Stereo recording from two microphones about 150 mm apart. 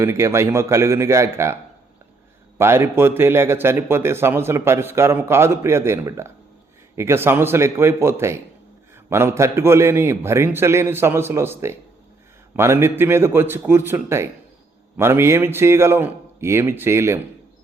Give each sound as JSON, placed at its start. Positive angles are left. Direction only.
{"t": 0.0, "sound": "a man's voice", "side_deg": -20}
{"t": 2.6, "sound": "a man's voice", "side_deg": -15}